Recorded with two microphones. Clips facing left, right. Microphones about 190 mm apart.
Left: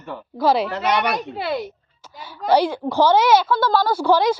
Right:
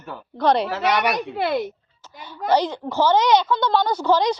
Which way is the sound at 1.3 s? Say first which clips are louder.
Right 2 dB; 50° right (ahead or behind).